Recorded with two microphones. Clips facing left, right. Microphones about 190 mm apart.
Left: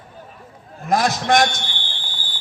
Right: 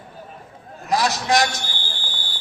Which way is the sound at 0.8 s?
50° left (ahead or behind).